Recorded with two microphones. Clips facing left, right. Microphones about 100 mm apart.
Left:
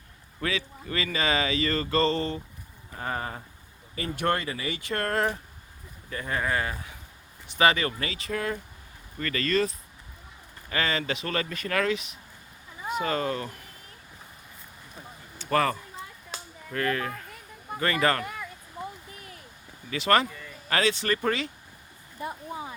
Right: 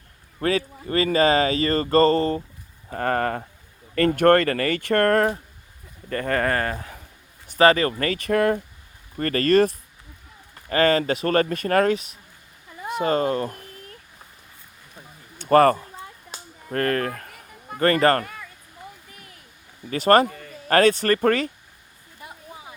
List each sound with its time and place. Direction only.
0.3 s speech: 40° right (ahead or behind)
2.9 s speech: 60° right (ahead or behind)
9.1 s speech: 45° right (ahead or behind)
10.7 s speech: 45° right (ahead or behind)
15.4 s speech: 50° right (ahead or behind)
19.9 s speech: 40° right (ahead or behind)